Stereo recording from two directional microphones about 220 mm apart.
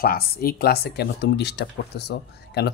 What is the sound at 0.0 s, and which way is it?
Speech, 40° left (ahead or behind).